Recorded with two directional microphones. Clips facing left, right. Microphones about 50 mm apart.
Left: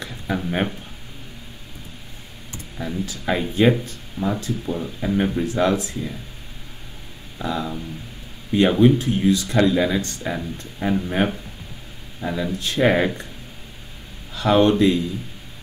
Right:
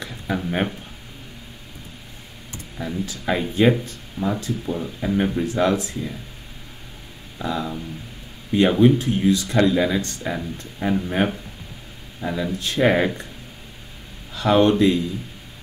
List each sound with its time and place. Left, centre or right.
0.0 s speech: centre
2.8 s speech: centre
4.2 s speech: centre
4.6 s speech: centre
7.3 s speech: centre
14.3 s speech: centre